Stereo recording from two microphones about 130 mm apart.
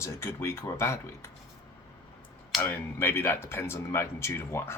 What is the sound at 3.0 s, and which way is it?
Speech, 15° left (ahead or behind).